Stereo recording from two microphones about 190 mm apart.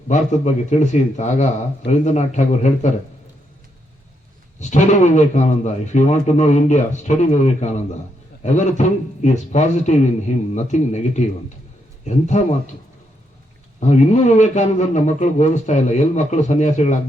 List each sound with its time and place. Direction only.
0.1 s a man's voice: 40° left (ahead or behind)
4.6 s a man's voice: 40° left (ahead or behind)
9.2 s a man's voice: 40° left (ahead or behind)
13.7 s a man's voice: 40° left (ahead or behind)